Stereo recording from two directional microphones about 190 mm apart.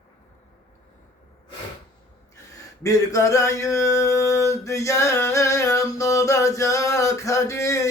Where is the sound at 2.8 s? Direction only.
15° left (ahead or behind).